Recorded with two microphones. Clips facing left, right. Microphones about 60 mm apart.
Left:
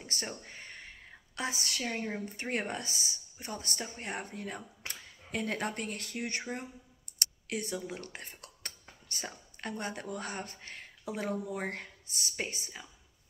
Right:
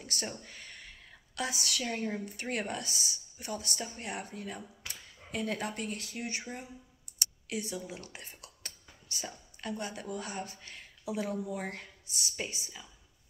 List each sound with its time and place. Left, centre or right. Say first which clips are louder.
0.0 s a sound: right 1 dB; left
1.9 s a woman's voice: even; left
2.4 s speech: left 1 dB; left